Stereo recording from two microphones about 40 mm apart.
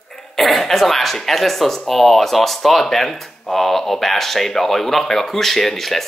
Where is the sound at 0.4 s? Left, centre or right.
Centre.